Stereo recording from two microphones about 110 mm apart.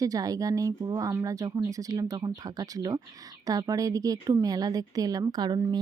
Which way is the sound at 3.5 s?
35° right (ahead or behind).